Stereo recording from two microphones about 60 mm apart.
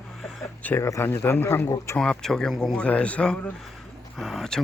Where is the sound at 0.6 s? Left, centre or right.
Left.